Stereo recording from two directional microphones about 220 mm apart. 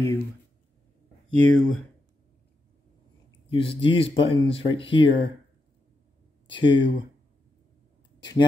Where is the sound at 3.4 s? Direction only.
25° left (ahead or behind).